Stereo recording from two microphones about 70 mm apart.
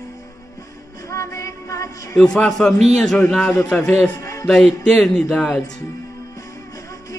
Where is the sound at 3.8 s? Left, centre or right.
Left.